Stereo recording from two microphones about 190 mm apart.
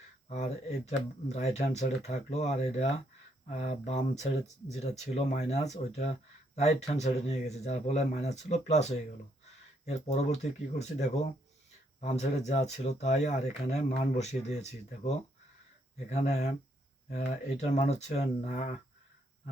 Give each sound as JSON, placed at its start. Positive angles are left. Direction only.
{"t": 0.3, "sound": "speech", "side_deg": 35}
{"t": 10.1, "sound": "speech", "side_deg": 35}